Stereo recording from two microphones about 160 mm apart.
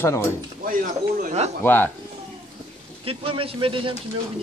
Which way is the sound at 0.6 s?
60° right (ahead or behind).